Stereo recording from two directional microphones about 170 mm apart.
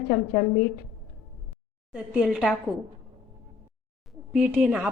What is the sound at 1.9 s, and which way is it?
Speech, 5° right (ahead or behind).